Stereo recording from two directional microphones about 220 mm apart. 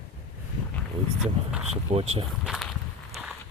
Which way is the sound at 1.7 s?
25° right (ahead or behind).